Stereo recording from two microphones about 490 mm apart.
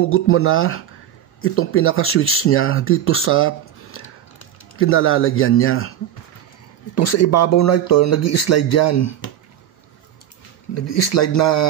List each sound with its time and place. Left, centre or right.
0.0 s speech: left
7.0 s speech: left
10.7 s speech: left